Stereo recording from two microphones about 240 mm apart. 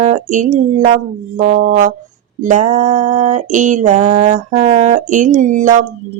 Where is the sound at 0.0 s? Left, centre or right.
Right.